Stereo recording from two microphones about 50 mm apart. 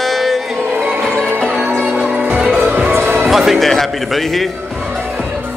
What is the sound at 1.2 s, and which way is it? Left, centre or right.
Music, right.